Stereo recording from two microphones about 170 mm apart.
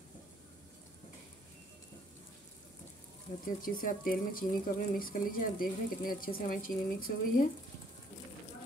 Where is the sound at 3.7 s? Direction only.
55° left (ahead or behind).